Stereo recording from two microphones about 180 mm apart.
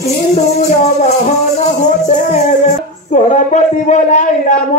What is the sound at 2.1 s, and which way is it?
Speech, 40° left (ahead or behind).